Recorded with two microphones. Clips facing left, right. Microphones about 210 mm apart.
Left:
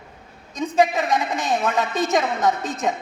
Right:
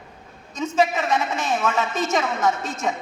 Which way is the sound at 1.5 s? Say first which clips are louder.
Left 1 dB; 35° left (ahead or behind).